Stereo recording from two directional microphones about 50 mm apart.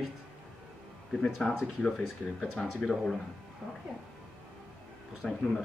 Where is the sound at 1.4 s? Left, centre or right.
Centre.